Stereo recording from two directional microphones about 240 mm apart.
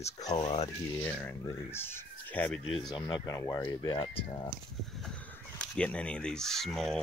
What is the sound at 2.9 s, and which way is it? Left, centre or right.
Speech, centre.